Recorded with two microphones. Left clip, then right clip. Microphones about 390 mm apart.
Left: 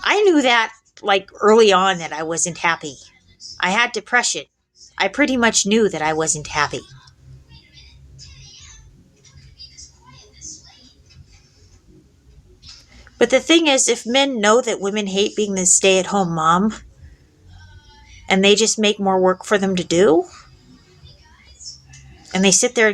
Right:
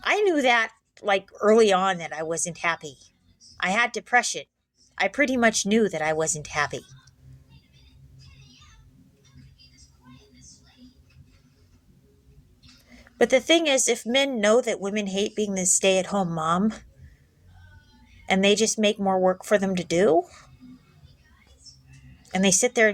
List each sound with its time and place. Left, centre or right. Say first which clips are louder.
0.0 s speech: left 6 dB; right
12.9 s speech: left 5 dB; right
18.3 s speech: left 6 dB; right
22.3 s speech: left 6 dB; right